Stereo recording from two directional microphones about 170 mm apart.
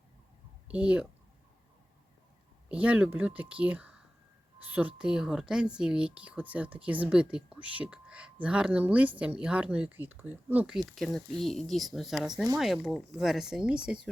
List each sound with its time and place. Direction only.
0.7 s speech: 5° right (ahead or behind)
2.6 s speech: 5° right (ahead or behind)